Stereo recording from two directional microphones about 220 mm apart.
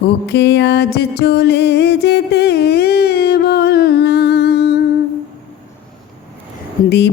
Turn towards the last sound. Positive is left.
turn(degrees=20)  # may be behind; listen again after turning